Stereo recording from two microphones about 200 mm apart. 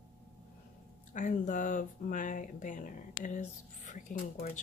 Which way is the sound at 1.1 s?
40° left (ahead or behind).